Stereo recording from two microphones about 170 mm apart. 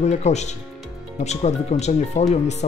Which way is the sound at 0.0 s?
40° left (ahead or behind).